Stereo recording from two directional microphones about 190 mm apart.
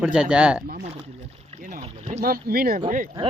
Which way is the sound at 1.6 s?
40° right (ahead or behind).